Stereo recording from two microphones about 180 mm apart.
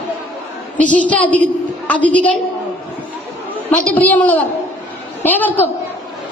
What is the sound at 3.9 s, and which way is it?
A woman's voice, 10° left (ahead or behind).